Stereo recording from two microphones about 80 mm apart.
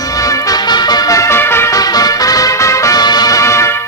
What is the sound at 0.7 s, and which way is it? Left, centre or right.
Music, left.